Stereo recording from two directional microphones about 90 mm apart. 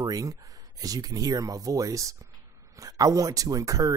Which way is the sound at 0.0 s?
45° right (ahead or behind).